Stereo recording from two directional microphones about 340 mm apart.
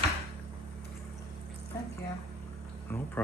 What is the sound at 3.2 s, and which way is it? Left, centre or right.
Speech, centre.